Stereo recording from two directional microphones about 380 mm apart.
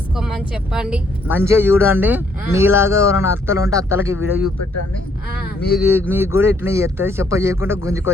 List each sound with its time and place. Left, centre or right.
0.7 s speech: centre
4.4 s speech: left
6.0 s speech: centre